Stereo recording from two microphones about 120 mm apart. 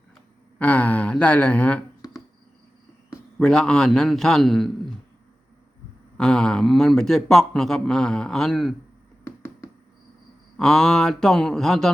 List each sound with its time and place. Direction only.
0.6 s speech: 10° left (ahead or behind)
3.3 s a man's voice: 5° left (ahead or behind)
6.1 s a man's voice: 5° left (ahead or behind)
9.2 s hands: 20° left (ahead or behind)
10.6 s a man's voice: 5° left (ahead or behind)